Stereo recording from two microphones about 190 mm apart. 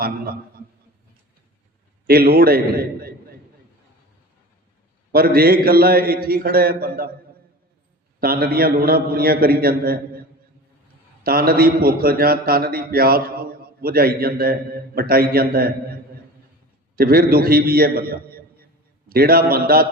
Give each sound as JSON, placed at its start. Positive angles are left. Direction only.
{"t": 2.0, "sound": "a man's voice", "side_deg": -50}
{"t": 5.1, "sound": "a man's voice", "side_deg": -50}
{"t": 8.2, "sound": "a man's voice", "side_deg": -50}
{"t": 11.2, "sound": "a man's voice", "side_deg": -50}